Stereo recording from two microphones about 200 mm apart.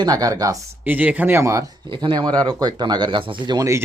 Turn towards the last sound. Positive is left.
turn(degrees=-20)  # may be behind; listen again after turning